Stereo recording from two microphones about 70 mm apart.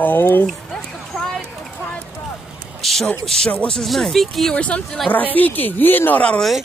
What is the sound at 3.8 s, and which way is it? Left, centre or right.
Speech, centre.